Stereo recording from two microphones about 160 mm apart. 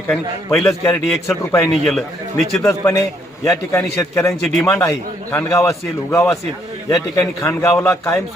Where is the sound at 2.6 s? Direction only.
20° left (ahead or behind).